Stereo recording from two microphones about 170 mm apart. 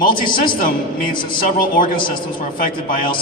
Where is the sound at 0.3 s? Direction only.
55° left (ahead or behind).